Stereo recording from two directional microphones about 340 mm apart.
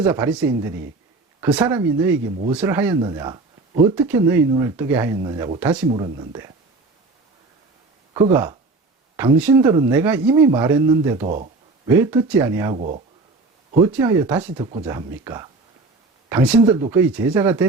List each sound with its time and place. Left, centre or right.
0.0 s speech: centre
8.1 s speech: centre
11.3 s speech: right
12.1 s speech: centre
13.8 s speech: centre